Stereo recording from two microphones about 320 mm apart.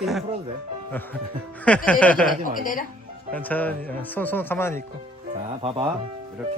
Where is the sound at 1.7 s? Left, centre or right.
Centre.